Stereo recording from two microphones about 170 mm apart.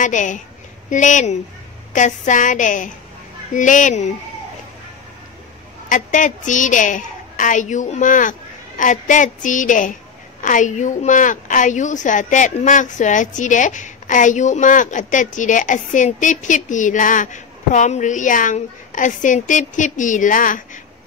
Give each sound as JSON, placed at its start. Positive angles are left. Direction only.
{"t": 0.0, "sound": "a woman's voice", "side_deg": 50}
{"t": 5.9, "sound": "a woman's voice", "side_deg": 50}